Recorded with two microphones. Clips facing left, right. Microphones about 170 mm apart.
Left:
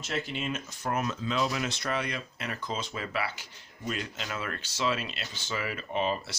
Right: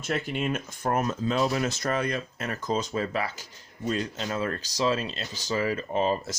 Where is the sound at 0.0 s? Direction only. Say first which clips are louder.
Right 5 dB; 50° right (ahead or behind).